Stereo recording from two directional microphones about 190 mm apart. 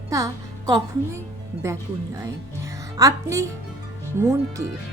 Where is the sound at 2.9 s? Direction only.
15° right (ahead or behind).